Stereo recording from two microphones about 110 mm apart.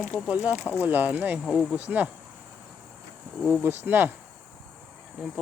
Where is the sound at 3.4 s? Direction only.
15° right (ahead or behind).